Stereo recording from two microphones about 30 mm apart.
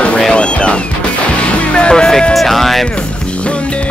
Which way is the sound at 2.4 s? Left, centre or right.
Centre.